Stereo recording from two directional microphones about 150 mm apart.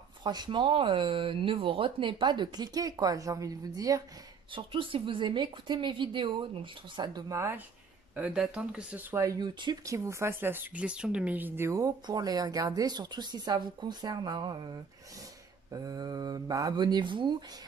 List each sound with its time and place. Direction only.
0.2 s speech: 30° right (ahead or behind)
4.5 s speech: 35° right (ahead or behind); by 7.6 s 20° right (ahead or behind)
8.2 s speech: 5° right (ahead or behind); by 17.4 s 35° right (ahead or behind)